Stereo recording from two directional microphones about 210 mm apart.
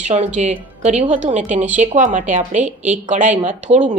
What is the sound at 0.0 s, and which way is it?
A woman's voice, 35° right (ahead or behind).